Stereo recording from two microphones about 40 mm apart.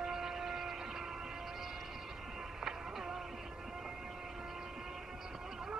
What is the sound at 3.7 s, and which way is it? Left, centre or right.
Train, centre.